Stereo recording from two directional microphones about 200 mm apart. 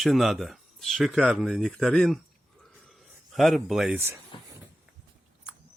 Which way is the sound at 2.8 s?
Centre (ahead or behind).